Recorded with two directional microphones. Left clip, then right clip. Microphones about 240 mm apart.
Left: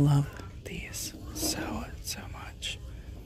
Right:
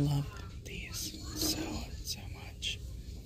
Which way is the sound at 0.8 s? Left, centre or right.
Left.